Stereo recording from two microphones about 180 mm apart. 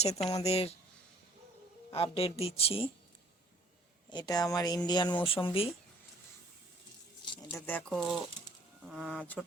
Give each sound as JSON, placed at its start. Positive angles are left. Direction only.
{"t": 0.0, "sound": "a woman's voice", "side_deg": 35}
{"t": 1.9, "sound": "a woman's voice", "side_deg": 35}
{"t": 4.1, "sound": "speech", "side_deg": 20}
{"t": 7.5, "sound": "speech", "side_deg": 5}